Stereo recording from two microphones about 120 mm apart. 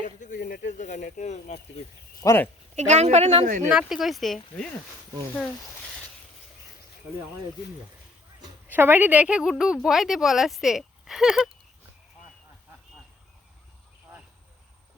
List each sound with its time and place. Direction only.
0.0 s speech: 90° left; by 1.8 s 70° left (ahead or behind)
2.2 s speech: 20° left (ahead or behind)
2.7 s a woman's voice: 70° right (ahead or behind)
3.7 s speech: 5° right (ahead or behind)
8.6 s speech: 15° right (ahead or behind)